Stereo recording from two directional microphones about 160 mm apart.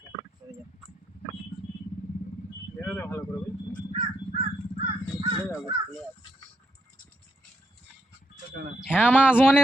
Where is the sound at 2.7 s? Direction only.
10° left (ahead or behind).